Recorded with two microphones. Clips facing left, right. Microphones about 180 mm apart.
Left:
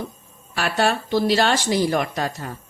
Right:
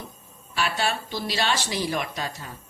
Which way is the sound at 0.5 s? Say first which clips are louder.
Left 5 dB; 50° left (ahead or behind).